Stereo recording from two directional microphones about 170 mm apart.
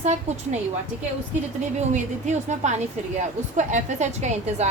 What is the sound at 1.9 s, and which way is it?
A woman's voice, 45° right (ahead or behind).